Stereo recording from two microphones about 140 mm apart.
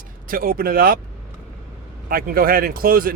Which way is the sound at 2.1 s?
90° right.